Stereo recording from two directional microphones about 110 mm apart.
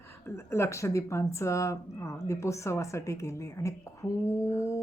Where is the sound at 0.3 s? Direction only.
25° left (ahead or behind).